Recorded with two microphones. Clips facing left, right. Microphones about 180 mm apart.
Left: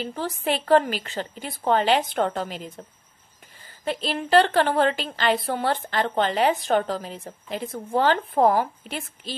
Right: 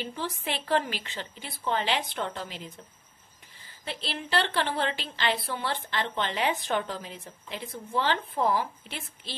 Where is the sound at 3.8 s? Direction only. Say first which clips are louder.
Left 9 dB; 45° left (ahead or behind).